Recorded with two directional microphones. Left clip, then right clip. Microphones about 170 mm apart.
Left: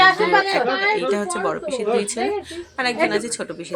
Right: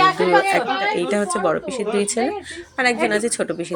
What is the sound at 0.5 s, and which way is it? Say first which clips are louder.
A woman's voice: even; 15° right (ahead or behind).